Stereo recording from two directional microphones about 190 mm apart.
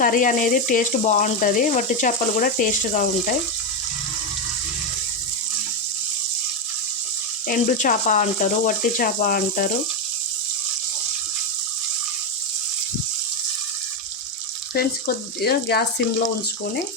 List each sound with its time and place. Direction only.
0.0 s speech: 45° left (ahead or behind)
7.4 s speech: 45° left (ahead or behind)
14.7 s speech: 55° left (ahead or behind)